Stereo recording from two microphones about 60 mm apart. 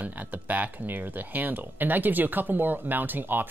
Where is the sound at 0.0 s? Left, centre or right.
Right.